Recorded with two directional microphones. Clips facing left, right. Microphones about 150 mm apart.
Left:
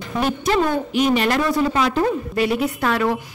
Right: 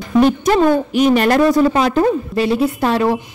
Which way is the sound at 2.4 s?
30° right (ahead or behind).